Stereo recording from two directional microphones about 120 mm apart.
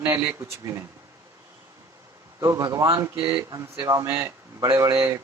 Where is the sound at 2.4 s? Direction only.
30° right (ahead or behind).